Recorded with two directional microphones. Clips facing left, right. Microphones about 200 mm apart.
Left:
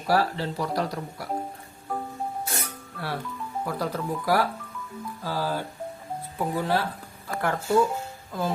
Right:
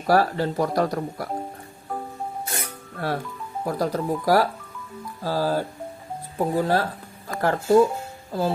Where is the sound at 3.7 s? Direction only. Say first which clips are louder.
Right 6 dB; 40° right (ahead or behind).